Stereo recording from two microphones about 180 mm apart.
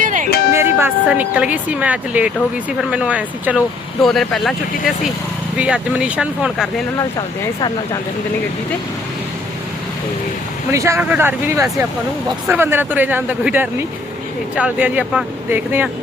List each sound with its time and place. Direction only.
0.0 s music: 45° right (ahead or behind)
0.5 s speech: 15° right (ahead or behind)
5.5 s speech: 5° right (ahead or behind)
10.7 s speech: 15° right (ahead or behind)